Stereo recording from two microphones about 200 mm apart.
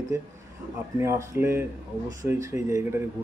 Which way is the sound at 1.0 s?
15° right (ahead or behind).